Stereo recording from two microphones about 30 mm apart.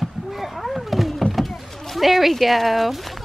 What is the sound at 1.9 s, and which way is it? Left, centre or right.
Speech, centre.